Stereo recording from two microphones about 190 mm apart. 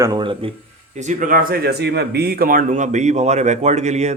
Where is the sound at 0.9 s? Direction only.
40° right (ahead or behind).